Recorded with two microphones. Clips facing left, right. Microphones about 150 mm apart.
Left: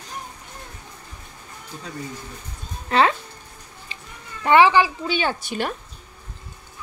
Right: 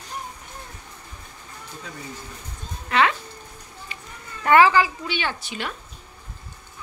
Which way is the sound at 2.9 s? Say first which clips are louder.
Left 2 dB; 35° left (ahead or behind).